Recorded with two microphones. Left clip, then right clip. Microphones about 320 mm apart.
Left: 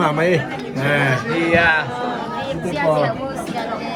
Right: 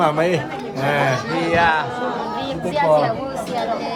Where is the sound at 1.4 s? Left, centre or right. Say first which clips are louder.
Left 1 dB; centre.